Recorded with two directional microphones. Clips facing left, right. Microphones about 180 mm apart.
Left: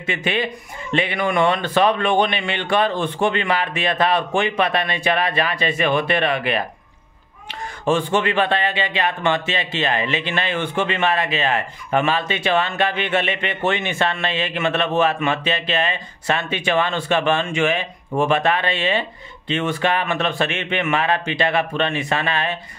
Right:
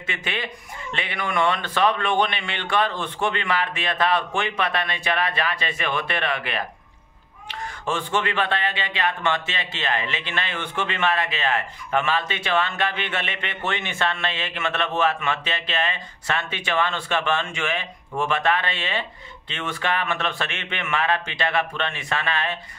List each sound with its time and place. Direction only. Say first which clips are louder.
0.0 s a man's voice: left 8 dB; 15° left (ahead or behind)
7.8 s a man's voice: left 6 dB; 15° left (ahead or behind)